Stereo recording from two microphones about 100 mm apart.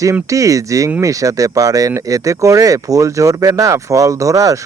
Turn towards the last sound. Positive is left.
turn(degrees=-35)  # may be behind; listen again after turning